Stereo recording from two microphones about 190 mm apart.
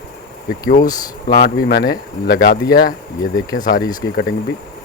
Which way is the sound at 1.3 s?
55° left (ahead or behind).